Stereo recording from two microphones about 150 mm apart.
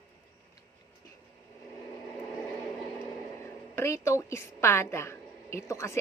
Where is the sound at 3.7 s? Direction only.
15° left (ahead or behind).